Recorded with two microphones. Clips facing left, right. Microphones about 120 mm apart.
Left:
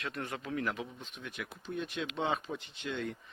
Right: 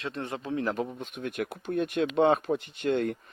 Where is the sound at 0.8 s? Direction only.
55° right (ahead or behind).